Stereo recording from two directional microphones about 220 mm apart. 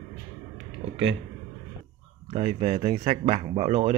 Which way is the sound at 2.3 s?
30° right (ahead or behind).